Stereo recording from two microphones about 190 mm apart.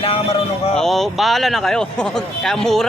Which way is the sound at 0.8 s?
Centre (ahead or behind).